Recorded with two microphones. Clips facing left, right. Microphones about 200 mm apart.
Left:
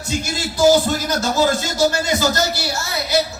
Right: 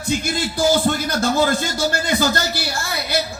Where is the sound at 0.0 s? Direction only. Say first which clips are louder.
Right 2 dB; 55° right (ahead or behind).